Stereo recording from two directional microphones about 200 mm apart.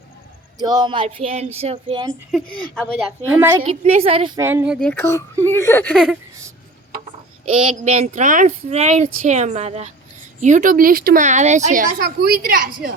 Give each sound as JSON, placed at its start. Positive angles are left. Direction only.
{"t": 0.6, "sound": "child singing", "side_deg": -20}
{"t": 3.2, "sound": "speech", "side_deg": -15}
{"t": 3.6, "sound": "child singing", "side_deg": -30}
{"t": 4.4, "sound": "speech", "side_deg": -10}
{"t": 4.9, "sound": "speech", "side_deg": 10}
{"t": 7.5, "sound": "a child's voice", "side_deg": -30}